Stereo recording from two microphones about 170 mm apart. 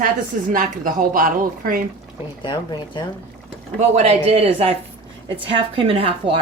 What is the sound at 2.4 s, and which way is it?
Speech, 25° left (ahead or behind).